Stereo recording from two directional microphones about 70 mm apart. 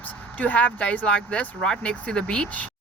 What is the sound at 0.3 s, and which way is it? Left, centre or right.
Speech, left.